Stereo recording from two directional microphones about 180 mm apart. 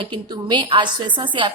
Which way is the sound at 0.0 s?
25° right (ahead or behind).